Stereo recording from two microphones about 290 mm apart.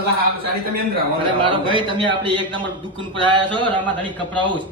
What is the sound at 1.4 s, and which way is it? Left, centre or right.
A man's voice, centre.